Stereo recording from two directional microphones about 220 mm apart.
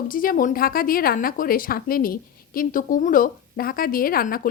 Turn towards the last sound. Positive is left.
turn(degrees=40)  # may be behind; listen again after turning